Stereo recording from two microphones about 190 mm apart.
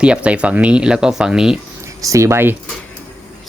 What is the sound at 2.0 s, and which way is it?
Speech, 15° right (ahead or behind).